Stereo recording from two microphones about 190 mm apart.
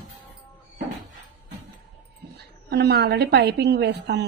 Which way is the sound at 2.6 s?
60° right (ahead or behind).